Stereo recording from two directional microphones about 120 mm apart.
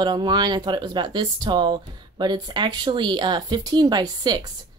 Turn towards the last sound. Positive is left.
turn(degrees=-35)  # may be behind; listen again after turning